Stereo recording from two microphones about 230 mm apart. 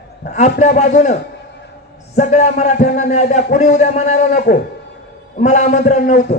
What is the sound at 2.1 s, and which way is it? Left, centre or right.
Speech, left.